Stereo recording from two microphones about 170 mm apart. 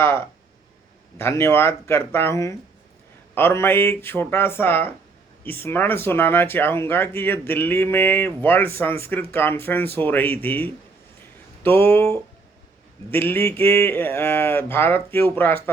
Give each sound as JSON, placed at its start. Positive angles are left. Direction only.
{"t": 0.0, "sound": "speech", "side_deg": 15}